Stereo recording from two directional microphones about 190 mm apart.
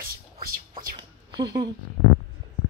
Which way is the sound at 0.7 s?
25° right (ahead or behind).